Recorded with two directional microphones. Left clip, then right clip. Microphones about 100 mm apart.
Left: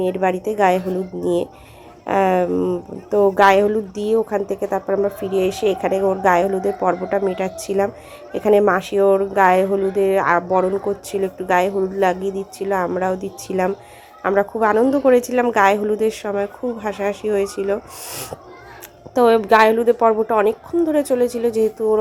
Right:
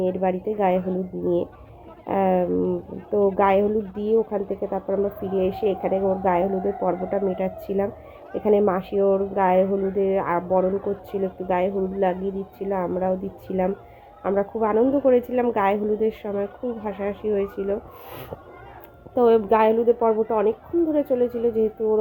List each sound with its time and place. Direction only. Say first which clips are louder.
0.0 s a woman's voice: left 4 dB; 35° left (ahead or behind)
2.6 s speech: left 3 dB; 25° left (ahead or behind)
3.3 s a woman's voice: left 8 dB; 35° left (ahead or behind)
18.1 s speech: left 6 dB; 20° left (ahead or behind)
19.1 s a woman's voice: left 4 dB; 35° left (ahead or behind)